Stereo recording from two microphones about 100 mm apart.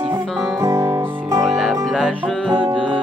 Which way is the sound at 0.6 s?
30° right (ahead or behind).